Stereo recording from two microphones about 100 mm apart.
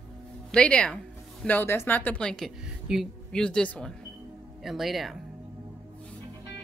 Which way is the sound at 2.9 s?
5° right (ahead or behind).